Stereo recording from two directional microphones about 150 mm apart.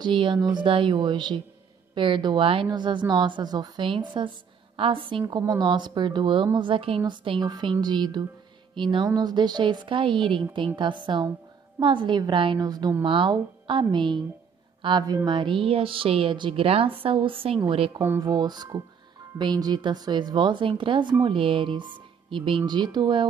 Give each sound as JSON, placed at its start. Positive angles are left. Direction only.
{"t": 0.0, "sound": "speech", "side_deg": -35}
{"t": 5.2, "sound": "a woman's voice", "side_deg": -20}